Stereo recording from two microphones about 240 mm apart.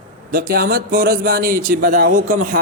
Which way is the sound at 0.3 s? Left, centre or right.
Right.